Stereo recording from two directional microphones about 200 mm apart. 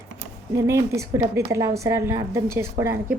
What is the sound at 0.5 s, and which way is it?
A woman's voice, 15° right (ahead or behind).